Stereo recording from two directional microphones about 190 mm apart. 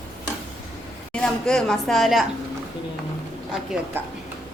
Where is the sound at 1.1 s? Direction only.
5° left (ahead or behind).